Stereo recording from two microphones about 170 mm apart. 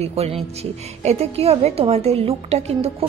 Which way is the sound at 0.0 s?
35° right (ahead or behind).